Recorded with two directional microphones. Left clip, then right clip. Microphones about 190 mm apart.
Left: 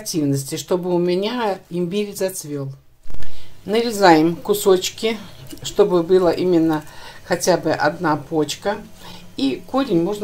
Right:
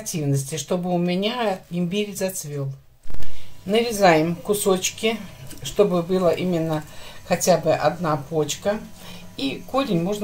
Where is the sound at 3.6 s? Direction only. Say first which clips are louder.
Left 3 dB; 35° left (ahead or behind).